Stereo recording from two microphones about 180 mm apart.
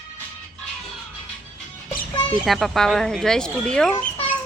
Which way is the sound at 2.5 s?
Centre (ahead or behind).